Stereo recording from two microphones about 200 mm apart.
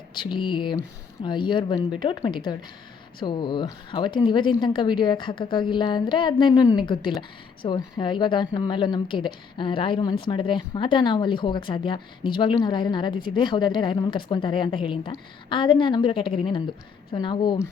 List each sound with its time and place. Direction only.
0.1 s a woman's voice: 25° left (ahead or behind)